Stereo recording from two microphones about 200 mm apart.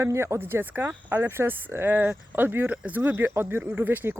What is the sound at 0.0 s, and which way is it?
Speech, 15° right (ahead or behind).